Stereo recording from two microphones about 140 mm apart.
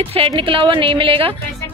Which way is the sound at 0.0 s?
40° right (ahead or behind).